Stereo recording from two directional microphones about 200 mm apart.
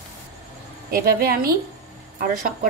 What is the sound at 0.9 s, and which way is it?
Speech, 50° right (ahead or behind).